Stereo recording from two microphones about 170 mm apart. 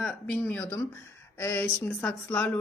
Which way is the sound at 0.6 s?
20° left (ahead or behind).